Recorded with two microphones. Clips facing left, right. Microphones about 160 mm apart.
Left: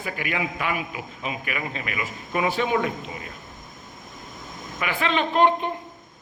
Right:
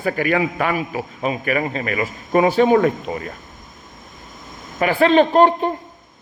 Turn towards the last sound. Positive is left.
turn(degrees=-40)  # may be behind; listen again after turning